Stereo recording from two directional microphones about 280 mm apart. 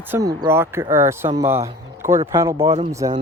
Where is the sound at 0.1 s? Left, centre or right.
Centre.